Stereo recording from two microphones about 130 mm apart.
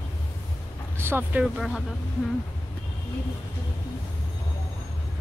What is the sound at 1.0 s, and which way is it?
Speech, 15° right (ahead or behind).